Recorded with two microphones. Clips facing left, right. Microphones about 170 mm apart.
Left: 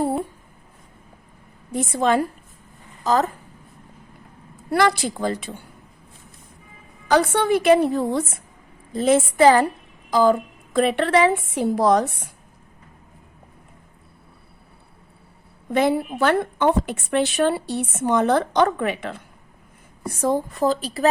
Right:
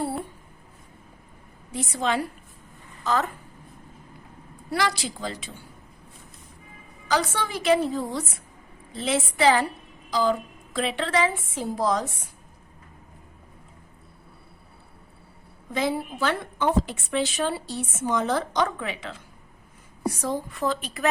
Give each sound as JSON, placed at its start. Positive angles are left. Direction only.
{"t": 1.7, "sound": "a woman's voice", "side_deg": 50}
{"t": 4.7, "sound": "a woman's voice", "side_deg": 55}
{"t": 7.1, "sound": "a woman's voice", "side_deg": 55}
{"t": 8.9, "sound": "a woman's voice", "side_deg": 45}
{"t": 15.7, "sound": "a woman's voice", "side_deg": 60}